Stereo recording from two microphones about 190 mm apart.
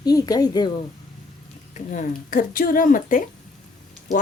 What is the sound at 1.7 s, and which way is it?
Speech, 40° left (ahead or behind).